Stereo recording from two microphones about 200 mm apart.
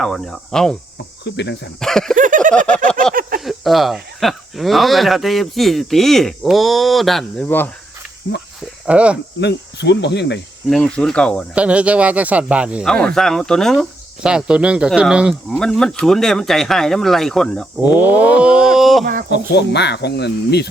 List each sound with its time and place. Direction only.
0.0 s speech: centre (ahead or behind)
1.2 s speech: 60° left (ahead or behind)
1.8 s speech: centre (ahead or behind)
2.1 s a sound: 40° right (ahead or behind)
2.6 s speech: 5° left (ahead or behind)
3.2 s speech: 45° right (ahead or behind)
3.4 s speech: centre (ahead or behind)
8.9 s speech: 5° right (ahead or behind)
9.4 s speech: 60° left (ahead or behind)
10.7 s speech: 5° left (ahead or behind)
11.5 s speech: 5° right (ahead or behind)
17.9 s speech: 5° right (ahead or behind)
19.3 s speech: 55° left (ahead or behind)